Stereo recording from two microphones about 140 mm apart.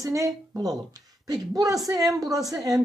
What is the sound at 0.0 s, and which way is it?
A woman's voice, 25° right (ahead or behind).